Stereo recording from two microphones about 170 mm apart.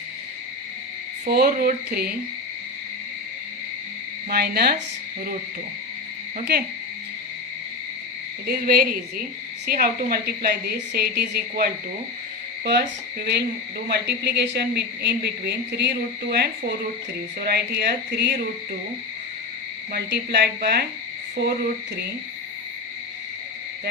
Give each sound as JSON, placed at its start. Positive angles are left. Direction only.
{"t": 1.3, "sound": "speech", "side_deg": -65}
{"t": 4.3, "sound": "a woman's voice", "side_deg": -65}
{"t": 8.4, "sound": "a woman's voice", "side_deg": -60}
{"t": 19.9, "sound": "speech", "side_deg": -70}